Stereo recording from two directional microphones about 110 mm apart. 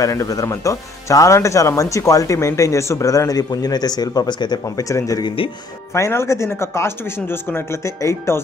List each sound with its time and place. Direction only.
0.0 s speech: 30° left (ahead or behind)
4.6 s speech: 30° left (ahead or behind)
5.2 s speech: 55° left (ahead or behind)
5.9 s speech: 25° left (ahead or behind)